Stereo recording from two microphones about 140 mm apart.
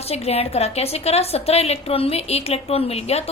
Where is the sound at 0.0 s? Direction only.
45° left (ahead or behind).